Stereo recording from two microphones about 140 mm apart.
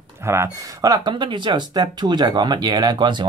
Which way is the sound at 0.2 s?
20° right (ahead or behind).